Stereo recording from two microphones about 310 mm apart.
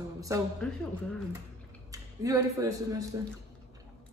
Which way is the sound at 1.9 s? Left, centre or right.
Centre.